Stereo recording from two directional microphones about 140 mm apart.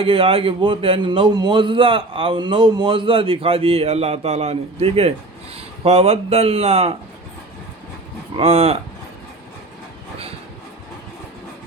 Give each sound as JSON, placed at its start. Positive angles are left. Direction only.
{"t": 0.0, "sound": "a man's voice", "side_deg": -40}
{"t": 8.4, "sound": "speech", "side_deg": -45}